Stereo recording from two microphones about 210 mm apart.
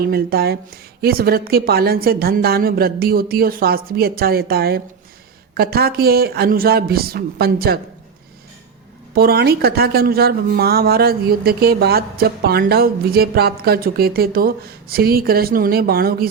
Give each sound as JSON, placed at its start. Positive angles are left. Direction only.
{"t": 0.0, "sound": "a woman's voice", "side_deg": -45}
{"t": 9.1, "sound": "a woman's voice", "side_deg": -45}